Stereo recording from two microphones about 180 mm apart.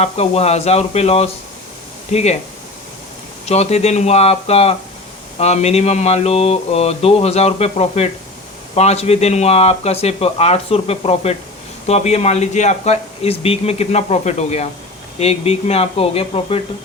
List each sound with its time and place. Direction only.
0.0 s speech: 35° left (ahead or behind)
3.4 s speech: 35° left (ahead or behind)